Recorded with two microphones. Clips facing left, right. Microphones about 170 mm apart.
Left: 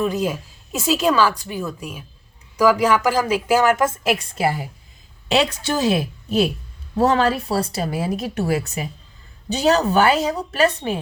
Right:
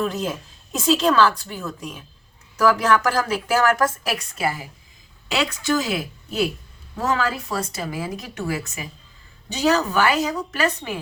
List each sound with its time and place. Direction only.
0.0 s a woman's voice: 10° left (ahead or behind); by 10.9 s 30° left (ahead or behind)